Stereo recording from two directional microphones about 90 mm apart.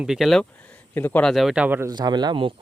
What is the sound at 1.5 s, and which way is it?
Speech, 15° right (ahead or behind).